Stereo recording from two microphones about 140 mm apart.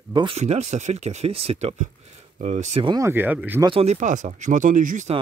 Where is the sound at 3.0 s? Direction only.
15° right (ahead or behind).